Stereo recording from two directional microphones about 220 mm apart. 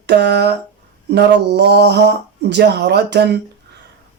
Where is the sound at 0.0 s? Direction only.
50° right (ahead or behind).